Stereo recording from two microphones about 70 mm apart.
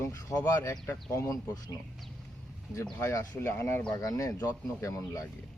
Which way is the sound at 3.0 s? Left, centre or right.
Left.